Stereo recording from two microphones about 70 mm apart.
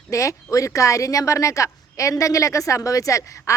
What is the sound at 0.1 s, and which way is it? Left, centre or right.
Speech, left.